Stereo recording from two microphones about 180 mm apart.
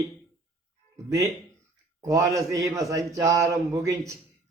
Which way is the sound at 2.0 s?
20° right (ahead or behind).